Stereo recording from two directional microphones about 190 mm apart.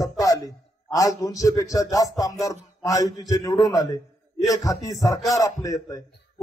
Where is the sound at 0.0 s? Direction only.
20° left (ahead or behind).